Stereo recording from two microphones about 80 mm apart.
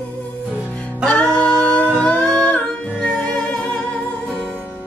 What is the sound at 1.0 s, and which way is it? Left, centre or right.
Music, centre.